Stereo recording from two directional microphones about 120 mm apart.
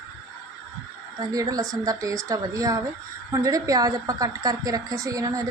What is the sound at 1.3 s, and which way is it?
A woman's voice, 30° right (ahead or behind).